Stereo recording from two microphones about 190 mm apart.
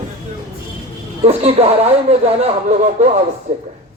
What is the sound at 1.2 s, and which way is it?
Speech, 30° right (ahead or behind).